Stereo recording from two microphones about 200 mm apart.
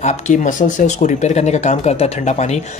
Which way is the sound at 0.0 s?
35° left (ahead or behind).